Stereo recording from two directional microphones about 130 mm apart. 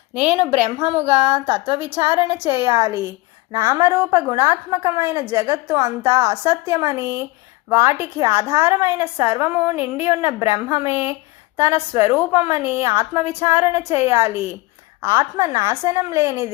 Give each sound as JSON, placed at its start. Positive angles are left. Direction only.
{"t": 0.1, "sound": "a woman's voice", "side_deg": -10}